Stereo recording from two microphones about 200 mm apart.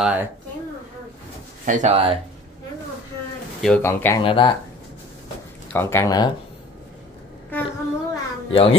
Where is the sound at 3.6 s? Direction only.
10° left (ahead or behind).